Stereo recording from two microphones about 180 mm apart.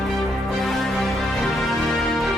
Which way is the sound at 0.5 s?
Centre (ahead or behind).